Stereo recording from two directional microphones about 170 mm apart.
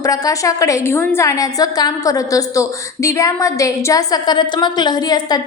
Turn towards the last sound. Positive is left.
turn(degrees=25)  # may be behind; listen again after turning